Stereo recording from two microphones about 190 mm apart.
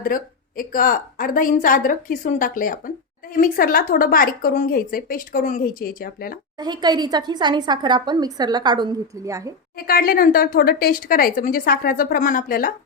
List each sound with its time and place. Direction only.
0.0 s a woman's voice: 50° left (ahead or behind)
6.6 s a woman's voice: 20° right (ahead or behind)
9.8 s a woman's voice: 50° left (ahead or behind)